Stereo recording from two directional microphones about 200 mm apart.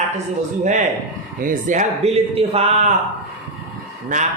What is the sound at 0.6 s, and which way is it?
Speech, 35° right (ahead or behind).